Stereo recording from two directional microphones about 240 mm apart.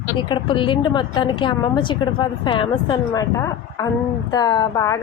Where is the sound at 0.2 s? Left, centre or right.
Centre.